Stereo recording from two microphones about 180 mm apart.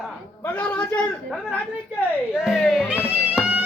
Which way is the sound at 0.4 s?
5° left (ahead or behind).